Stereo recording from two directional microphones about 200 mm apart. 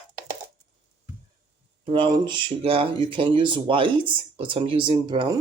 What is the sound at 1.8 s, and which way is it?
Speech, 25° right (ahead or behind).